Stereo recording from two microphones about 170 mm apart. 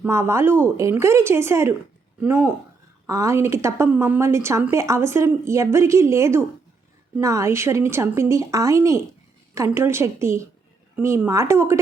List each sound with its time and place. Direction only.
0.0 s a woman's voice: 15° right (ahead or behind)